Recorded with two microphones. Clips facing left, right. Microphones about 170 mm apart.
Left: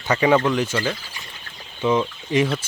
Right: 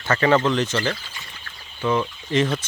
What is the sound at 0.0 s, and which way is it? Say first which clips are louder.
Speech: left 1 dB; 15° left (ahead or behind).